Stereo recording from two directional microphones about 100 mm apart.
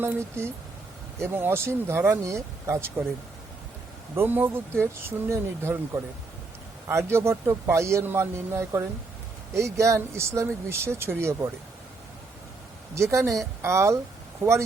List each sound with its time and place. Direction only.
0.0 s a man's voice: 25° right (ahead or behind)
4.1 s a man's voice: 20° right (ahead or behind)
12.9 s a man's voice: 30° right (ahead or behind)